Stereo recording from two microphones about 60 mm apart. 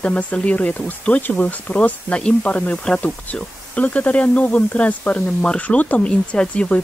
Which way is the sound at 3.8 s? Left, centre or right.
Left.